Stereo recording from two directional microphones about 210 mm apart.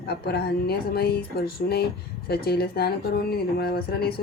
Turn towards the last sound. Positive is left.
turn(degrees=45)  # may be behind; listen again after turning